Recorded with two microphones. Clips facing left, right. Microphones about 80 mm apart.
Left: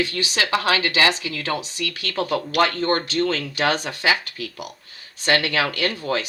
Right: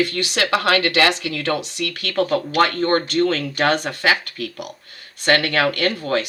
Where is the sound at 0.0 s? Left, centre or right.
Right.